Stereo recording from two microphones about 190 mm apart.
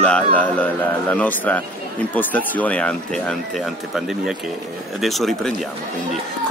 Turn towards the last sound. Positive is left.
turn(degrees=0)  # may be behind; listen again after turning